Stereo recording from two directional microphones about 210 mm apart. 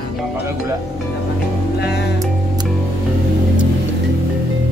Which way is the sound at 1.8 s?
50° left (ahead or behind).